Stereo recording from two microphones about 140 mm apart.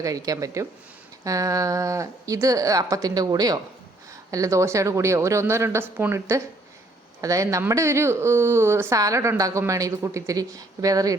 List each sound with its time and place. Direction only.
0.0 s a woman's voice: 25° right (ahead or behind)